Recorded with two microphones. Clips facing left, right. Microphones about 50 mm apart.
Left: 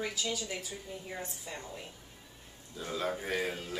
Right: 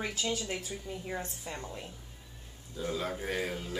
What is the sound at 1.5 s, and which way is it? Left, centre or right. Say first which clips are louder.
Speech: right 2 dB; right.